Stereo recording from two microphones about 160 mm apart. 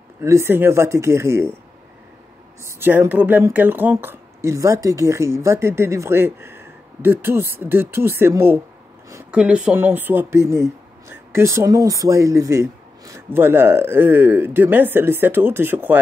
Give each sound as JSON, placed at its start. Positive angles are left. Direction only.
{"t": 0.2, "sound": "speech", "side_deg": -15}
{"t": 2.6, "sound": "speech", "side_deg": -15}